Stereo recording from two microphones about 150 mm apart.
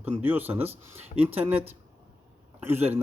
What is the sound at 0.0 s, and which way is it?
Speech, 10° right (ahead or behind).